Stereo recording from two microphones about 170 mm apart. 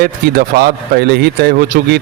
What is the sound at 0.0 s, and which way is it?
A man's voice, 65° right (ahead or behind).